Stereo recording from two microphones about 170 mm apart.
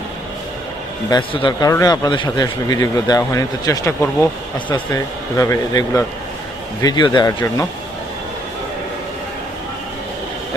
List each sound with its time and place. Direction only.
1.1 s a man's voice: 30° left (ahead or behind)
5.4 s a man's voice: 20° left (ahead or behind)